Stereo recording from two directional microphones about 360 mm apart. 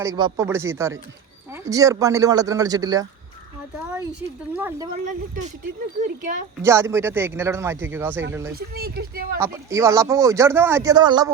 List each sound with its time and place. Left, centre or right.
0.0 s speech: centre
4.5 s speech: centre
5.0 s speech: right
6.6 s speech: centre
8.5 s speech: right
9.4 s speech: centre